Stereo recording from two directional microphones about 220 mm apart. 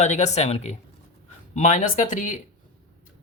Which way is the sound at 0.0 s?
30° left (ahead or behind).